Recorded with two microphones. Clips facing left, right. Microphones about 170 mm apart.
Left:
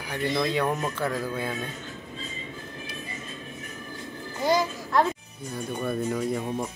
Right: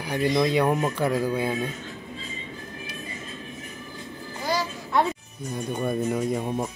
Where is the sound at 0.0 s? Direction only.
10° right (ahead or behind).